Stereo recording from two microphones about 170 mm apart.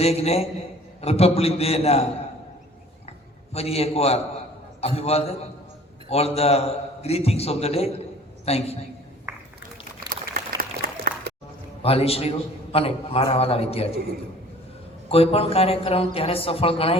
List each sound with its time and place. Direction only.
0.0 s a man's voice: 40° left (ahead or behind)
3.1 s a sound: 40° left (ahead or behind)
4.8 s a man's voice: 35° left (ahead or behind)
10.1 s a sound: 55° right (ahead or behind)
11.8 s a man's voice: 35° left (ahead or behind)
15.1 s a man's voice: 35° left (ahead or behind)